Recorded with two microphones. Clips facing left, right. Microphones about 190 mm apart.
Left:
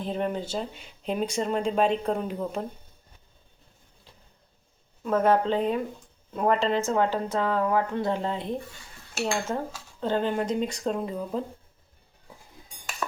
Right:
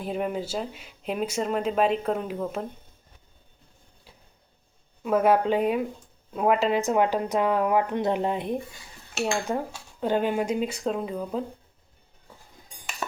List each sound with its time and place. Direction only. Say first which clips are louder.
0.0 s speech: even; 10° right (ahead or behind)
5.0 s speech: right 1 dB; 10° right (ahead or behind)